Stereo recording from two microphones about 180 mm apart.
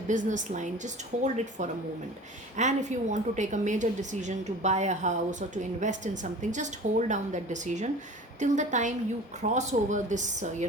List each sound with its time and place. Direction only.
0.1 s a woman's voice: 45° right (ahead or behind)